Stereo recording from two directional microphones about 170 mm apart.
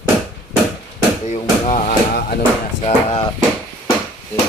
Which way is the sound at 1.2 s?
40° left (ahead or behind).